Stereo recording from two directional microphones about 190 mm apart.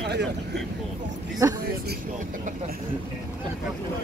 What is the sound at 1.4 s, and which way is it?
Speech, 15° right (ahead or behind).